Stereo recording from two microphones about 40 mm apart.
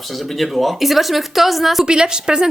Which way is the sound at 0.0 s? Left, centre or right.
Centre.